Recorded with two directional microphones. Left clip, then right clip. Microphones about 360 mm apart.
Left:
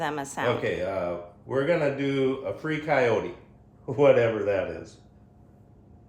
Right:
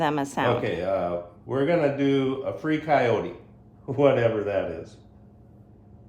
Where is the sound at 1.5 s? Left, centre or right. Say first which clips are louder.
Right 1 dB; centre.